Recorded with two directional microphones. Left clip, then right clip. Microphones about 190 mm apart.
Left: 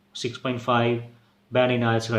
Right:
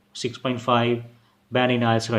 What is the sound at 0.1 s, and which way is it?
Speech, 20° right (ahead or behind).